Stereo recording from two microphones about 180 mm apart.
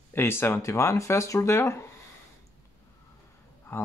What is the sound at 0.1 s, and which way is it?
Speech, 10° left (ahead or behind).